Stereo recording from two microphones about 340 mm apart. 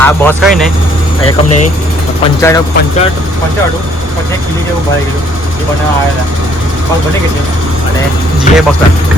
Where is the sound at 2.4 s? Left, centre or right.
Centre.